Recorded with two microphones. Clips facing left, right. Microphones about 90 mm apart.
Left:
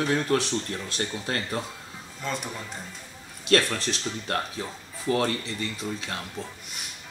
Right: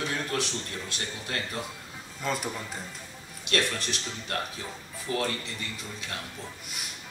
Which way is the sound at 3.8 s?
35° left (ahead or behind).